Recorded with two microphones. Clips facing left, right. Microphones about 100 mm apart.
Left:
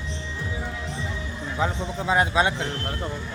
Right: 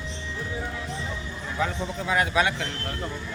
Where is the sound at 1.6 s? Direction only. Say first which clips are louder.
Left 1 dB; 25° left (ahead or behind).